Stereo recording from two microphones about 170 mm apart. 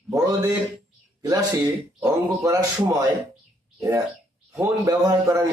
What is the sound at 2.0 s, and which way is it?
Speech, 20° right (ahead or behind).